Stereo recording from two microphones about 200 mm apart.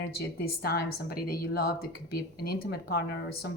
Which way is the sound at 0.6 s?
50° left (ahead or behind).